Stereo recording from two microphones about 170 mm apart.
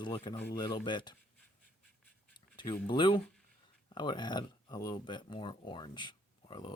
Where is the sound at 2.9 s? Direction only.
30° left (ahead or behind).